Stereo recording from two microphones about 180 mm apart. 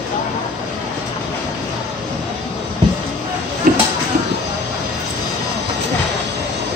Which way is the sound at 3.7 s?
50° right (ahead or behind).